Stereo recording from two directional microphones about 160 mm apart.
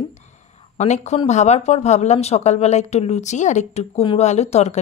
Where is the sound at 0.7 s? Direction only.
45° left (ahead or behind).